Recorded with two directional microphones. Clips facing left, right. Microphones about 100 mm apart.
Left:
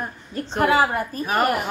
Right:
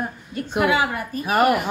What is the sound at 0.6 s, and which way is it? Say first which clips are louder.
Speech: left 3 dB; 40° left (ahead or behind).